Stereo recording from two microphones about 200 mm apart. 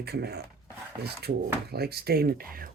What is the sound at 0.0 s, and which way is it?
Speech, 55° right (ahead or behind).